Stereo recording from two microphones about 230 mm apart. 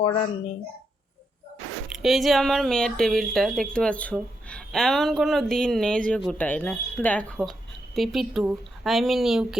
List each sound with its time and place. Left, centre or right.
0.0 s speech: left
1.9 s speech: centre